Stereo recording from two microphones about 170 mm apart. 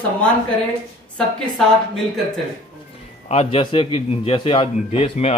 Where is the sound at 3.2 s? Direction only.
35° left (ahead or behind).